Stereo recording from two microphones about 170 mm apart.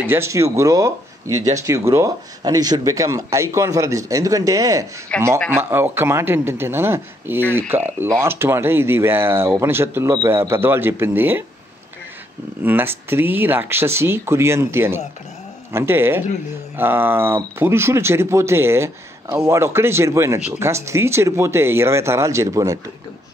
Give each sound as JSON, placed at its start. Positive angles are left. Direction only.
{"t": 0.0, "sound": "speech", "side_deg": -15}
{"t": 5.1, "sound": "speech", "side_deg": 5}
{"t": 5.5, "sound": "speech", "side_deg": -15}
{"t": 12.6, "sound": "speech", "side_deg": -10}